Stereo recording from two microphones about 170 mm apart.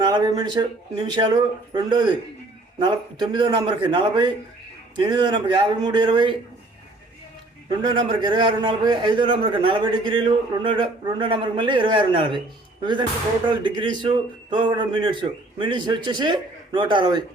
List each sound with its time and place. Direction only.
0.0 s a man's voice: 25° right (ahead or behind)
7.8 s a man's voice: 30° right (ahead or behind)